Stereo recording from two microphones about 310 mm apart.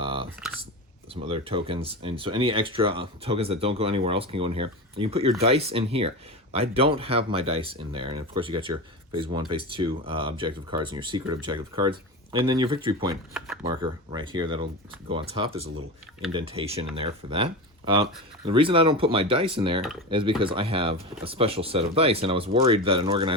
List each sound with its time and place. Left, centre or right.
0.0 s typing: centre
1.1 s speech: centre